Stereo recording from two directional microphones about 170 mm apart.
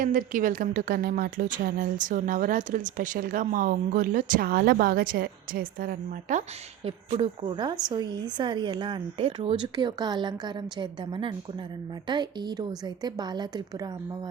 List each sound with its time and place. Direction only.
0.0 s a woman's voice: 50° right (ahead or behind)
6.8 s a woman's voice: 35° right (ahead or behind)